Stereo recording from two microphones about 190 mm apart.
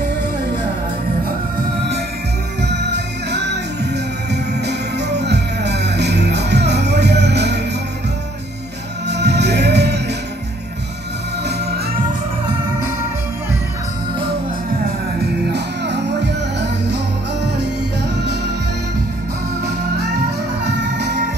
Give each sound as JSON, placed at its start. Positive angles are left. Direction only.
{"t": 2.7, "sound": "music", "side_deg": -65}
{"t": 9.0, "sound": "music", "side_deg": -65}
{"t": 11.4, "sound": "music", "side_deg": -55}
{"t": 15.5, "sound": "music", "side_deg": -60}
{"t": 20.0, "sound": "music", "side_deg": -60}